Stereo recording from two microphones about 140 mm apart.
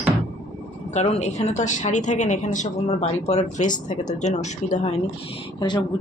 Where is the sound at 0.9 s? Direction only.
50° left (ahead or behind).